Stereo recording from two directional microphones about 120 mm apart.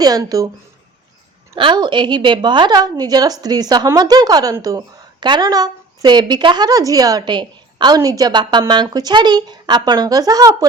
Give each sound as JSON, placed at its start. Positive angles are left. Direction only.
{"t": 0.0, "sound": "a woman's voice", "side_deg": -30}
{"t": 1.5, "sound": "a woman's voice", "side_deg": -40}